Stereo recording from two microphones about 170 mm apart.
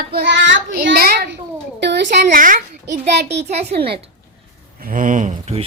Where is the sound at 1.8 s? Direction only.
85° right.